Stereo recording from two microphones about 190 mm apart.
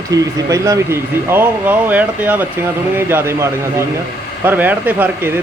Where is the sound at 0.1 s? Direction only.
15° right (ahead or behind).